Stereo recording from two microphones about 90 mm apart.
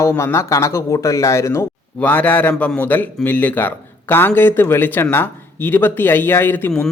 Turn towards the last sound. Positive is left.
turn(degrees=20)  # may be behind; listen again after turning